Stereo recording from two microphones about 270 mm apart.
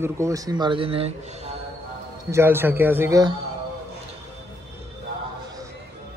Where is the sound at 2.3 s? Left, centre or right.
Centre.